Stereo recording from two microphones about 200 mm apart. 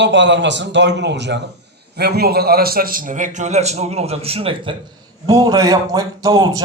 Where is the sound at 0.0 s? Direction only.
60° right (ahead or behind).